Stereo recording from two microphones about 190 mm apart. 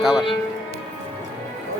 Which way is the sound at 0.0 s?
Centre (ahead or behind).